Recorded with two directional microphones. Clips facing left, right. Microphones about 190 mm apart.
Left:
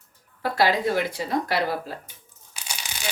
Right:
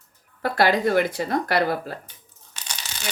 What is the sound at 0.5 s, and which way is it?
Speech, 55° right (ahead or behind).